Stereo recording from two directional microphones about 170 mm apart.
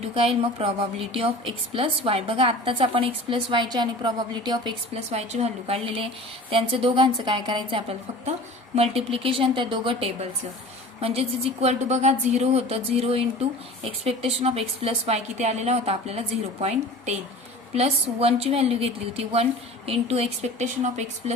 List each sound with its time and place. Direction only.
0.1 s a woman's voice: 35° right (ahead or behind)
4.9 s a woman's voice: 40° right (ahead or behind)